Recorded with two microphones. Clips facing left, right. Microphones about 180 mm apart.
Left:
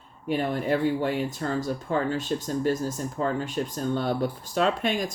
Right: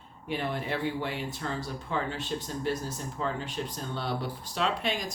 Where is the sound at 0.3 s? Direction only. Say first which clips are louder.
Left 7 dB; 45° left (ahead or behind).